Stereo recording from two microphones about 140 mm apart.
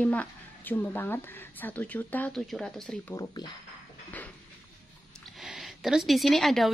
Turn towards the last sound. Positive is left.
turn(degrees=0)  # may be behind; listen again after turning